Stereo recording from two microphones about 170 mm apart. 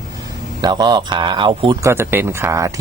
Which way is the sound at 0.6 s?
25° right (ahead or behind).